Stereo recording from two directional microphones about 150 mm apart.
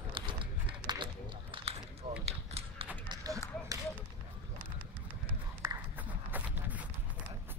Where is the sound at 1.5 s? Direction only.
35° right (ahead or behind).